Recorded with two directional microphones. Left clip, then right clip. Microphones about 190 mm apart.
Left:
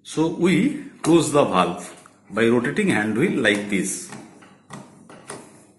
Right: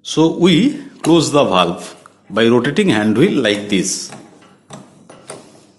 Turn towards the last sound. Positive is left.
turn(degrees=-60)  # may be behind; listen again after turning